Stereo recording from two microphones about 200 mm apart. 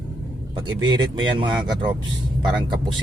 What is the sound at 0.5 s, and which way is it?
Speech, 20° right (ahead or behind).